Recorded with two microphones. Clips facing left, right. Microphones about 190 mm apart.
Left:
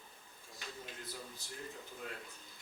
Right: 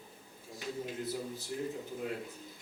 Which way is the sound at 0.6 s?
5° right (ahead or behind).